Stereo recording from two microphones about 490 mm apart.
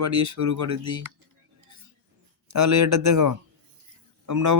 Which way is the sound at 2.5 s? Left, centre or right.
Right.